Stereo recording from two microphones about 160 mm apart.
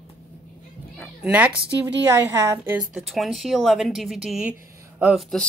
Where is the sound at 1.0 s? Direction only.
5° right (ahead or behind).